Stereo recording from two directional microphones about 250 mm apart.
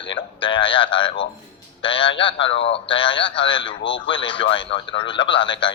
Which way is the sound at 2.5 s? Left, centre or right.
Left.